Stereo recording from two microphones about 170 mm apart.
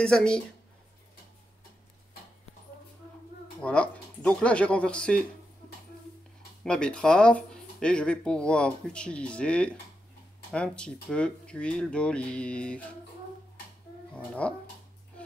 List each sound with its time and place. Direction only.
0.0 s speech: 5° left (ahead or behind)
3.6 s speech: 5° left (ahead or behind)
6.6 s speech: 5° left (ahead or behind)
14.1 s speech: 5° left (ahead or behind)